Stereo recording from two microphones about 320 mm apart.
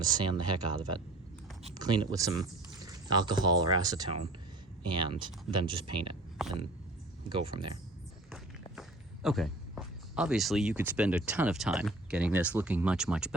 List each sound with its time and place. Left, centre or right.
0.0 s speech: centre
7.3 s speech: centre
8.7 s speech: centre